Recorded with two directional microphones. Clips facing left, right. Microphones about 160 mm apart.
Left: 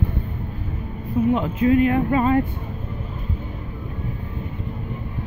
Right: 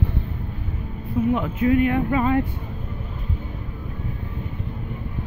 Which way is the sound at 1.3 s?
30° left (ahead or behind).